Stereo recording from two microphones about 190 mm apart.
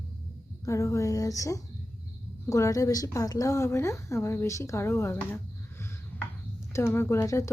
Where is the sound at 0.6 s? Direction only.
15° left (ahead or behind).